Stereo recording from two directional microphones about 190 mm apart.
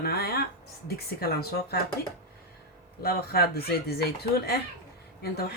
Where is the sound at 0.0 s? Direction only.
55° left (ahead or behind).